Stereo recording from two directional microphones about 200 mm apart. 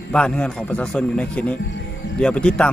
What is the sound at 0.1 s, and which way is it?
Speech, 5° left (ahead or behind).